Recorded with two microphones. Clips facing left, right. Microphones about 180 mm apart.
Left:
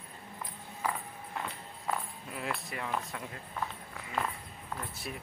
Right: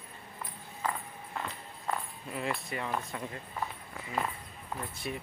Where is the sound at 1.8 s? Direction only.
Centre (ahead or behind).